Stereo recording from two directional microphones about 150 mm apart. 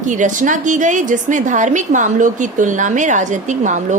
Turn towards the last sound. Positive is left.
turn(degrees=-55)  # may be behind; listen again after turning